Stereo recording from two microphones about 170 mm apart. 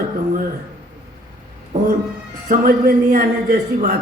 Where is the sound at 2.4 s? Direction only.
60° right (ahead or behind).